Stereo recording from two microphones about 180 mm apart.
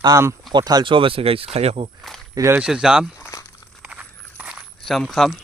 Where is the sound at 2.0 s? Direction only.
Centre (ahead or behind).